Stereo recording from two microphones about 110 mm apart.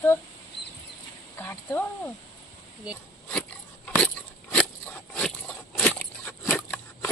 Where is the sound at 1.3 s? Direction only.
20° left (ahead or behind).